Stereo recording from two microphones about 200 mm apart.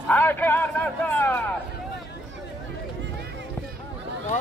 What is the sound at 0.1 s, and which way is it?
Speech, 10° left (ahead or behind).